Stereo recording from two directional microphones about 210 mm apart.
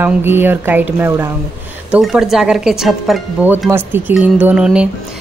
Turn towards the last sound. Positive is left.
turn(degrees=-5)  # may be behind; listen again after turning